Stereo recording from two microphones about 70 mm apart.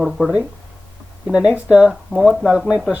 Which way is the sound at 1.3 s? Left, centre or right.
Centre.